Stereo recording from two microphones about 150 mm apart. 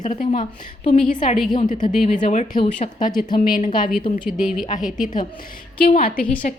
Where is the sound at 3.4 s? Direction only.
65° left (ahead or behind).